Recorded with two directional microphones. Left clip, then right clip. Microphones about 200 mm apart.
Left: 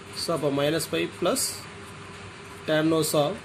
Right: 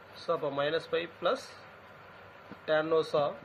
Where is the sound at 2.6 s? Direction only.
35° right (ahead or behind).